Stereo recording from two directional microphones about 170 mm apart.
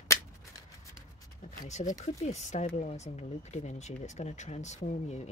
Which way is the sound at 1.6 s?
45° left (ahead or behind).